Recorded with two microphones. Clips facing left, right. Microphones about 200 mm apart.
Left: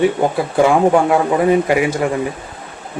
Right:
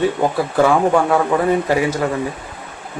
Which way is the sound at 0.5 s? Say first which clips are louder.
Left 3 dB; 15° left (ahead or behind).